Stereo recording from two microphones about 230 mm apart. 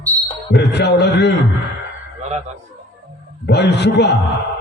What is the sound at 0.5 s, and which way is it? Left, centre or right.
Speech, left.